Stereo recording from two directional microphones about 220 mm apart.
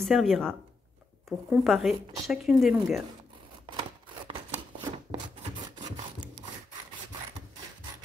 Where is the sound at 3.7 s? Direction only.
20° right (ahead or behind).